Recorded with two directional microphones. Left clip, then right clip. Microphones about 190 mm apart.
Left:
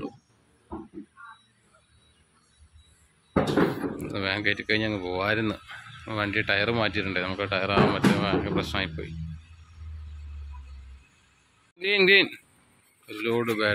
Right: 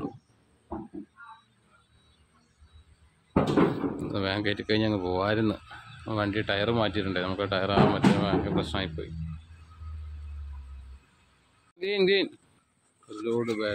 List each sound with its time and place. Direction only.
3.3 s speech: 25° right (ahead or behind)
11.8 s speech: 5° right (ahead or behind)